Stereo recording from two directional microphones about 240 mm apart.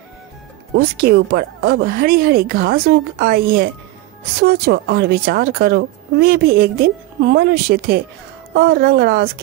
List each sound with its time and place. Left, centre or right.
0.7 s a woman's voice: right